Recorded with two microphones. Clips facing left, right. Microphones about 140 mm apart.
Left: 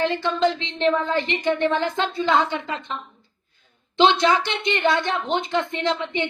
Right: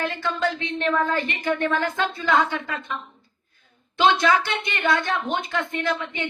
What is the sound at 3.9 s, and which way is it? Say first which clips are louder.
A woman's voice: left 1 dB; 20° left (ahead or behind).